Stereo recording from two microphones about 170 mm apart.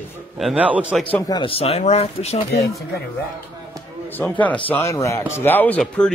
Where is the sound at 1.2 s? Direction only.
25° left (ahead or behind).